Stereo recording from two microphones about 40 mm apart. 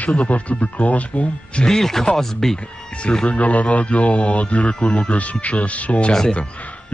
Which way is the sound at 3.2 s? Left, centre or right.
Left.